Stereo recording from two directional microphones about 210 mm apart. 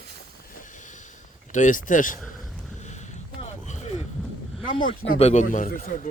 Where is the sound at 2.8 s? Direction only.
35° left (ahead or behind).